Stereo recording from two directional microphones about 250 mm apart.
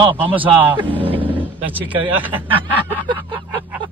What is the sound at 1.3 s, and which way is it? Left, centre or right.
Vehicle, centre.